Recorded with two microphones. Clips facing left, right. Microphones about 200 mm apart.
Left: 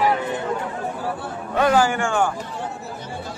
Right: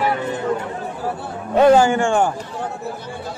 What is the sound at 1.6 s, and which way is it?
Speech, 25° right (ahead or behind).